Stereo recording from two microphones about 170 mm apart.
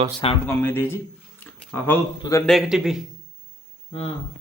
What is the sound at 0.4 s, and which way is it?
Speech, 10° left (ahead or behind).